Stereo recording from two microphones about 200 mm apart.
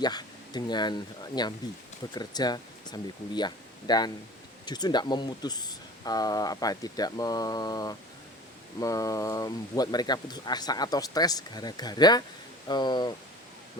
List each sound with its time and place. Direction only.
0.0 s speech: 20° left (ahead or behind)